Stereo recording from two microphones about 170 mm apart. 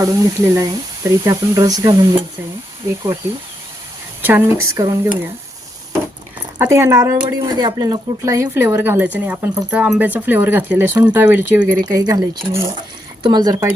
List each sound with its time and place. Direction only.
0.0 s speech: 20° right (ahead or behind)
4.2 s speech: 10° right (ahead or behind)
6.6 s speech: 15° right (ahead or behind)